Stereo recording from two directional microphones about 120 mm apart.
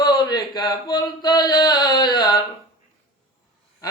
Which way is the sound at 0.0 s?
35° left (ahead or behind).